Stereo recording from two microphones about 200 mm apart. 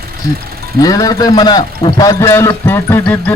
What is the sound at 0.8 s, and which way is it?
A man's voice, 20° left (ahead or behind).